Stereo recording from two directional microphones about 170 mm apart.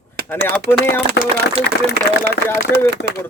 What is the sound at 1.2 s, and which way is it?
Speech, 90° left.